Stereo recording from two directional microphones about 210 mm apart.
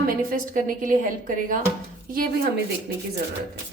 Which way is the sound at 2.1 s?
45° right (ahead or behind).